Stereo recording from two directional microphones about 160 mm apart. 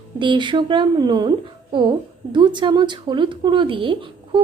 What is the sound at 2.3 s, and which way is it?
A woman's voice, 30° right (ahead or behind).